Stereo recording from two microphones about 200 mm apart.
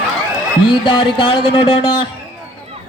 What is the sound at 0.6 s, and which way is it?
A man's voice, 25° left (ahead or behind).